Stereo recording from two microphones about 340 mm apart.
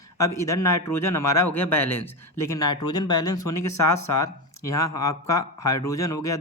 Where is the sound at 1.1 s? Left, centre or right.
Left.